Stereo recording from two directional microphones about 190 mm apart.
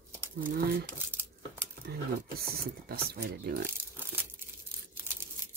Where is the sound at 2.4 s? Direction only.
55° right (ahead or behind).